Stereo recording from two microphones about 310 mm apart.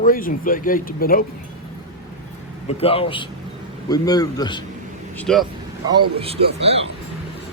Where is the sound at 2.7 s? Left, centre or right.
Centre.